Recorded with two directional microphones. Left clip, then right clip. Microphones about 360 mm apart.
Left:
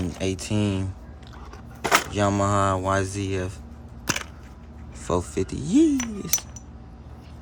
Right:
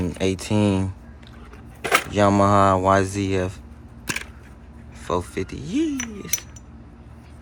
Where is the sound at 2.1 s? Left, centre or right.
Centre.